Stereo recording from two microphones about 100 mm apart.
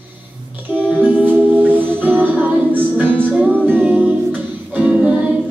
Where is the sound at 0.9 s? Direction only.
15° right (ahead or behind).